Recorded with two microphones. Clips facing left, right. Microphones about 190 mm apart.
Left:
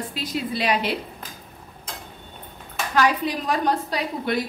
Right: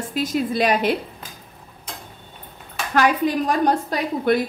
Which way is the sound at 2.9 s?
50° right (ahead or behind).